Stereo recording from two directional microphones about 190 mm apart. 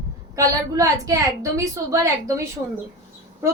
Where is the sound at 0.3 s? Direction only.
15° right (ahead or behind).